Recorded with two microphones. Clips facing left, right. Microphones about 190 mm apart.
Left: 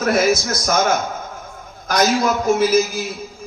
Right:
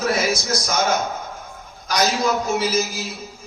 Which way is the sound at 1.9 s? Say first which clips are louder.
Left 3 dB; 50° left (ahead or behind).